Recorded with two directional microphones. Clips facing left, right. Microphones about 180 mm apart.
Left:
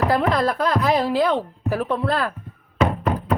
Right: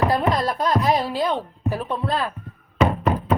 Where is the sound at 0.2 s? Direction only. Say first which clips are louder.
Left 2 dB; 80° left.